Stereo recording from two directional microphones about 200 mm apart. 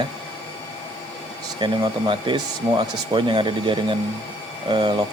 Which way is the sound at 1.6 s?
25° right (ahead or behind).